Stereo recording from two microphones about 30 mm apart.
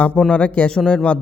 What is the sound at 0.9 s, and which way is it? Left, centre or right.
Speech, left.